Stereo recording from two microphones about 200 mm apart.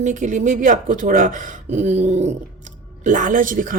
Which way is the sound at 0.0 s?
40° right (ahead or behind).